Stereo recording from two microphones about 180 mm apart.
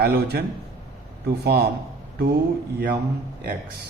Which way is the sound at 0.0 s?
60° right (ahead or behind).